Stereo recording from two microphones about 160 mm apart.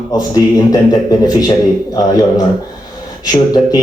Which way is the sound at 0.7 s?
25° left (ahead or behind).